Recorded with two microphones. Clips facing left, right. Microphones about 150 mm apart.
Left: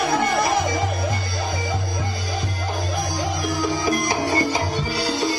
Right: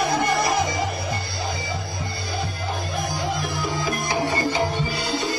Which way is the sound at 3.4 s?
40° left (ahead or behind).